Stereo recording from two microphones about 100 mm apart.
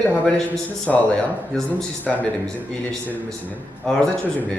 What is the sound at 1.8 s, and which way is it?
Speech, 15° left (ahead or behind).